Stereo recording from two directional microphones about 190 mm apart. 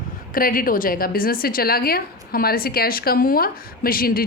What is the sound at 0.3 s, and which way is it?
A woman's voice, 50° left (ahead or behind).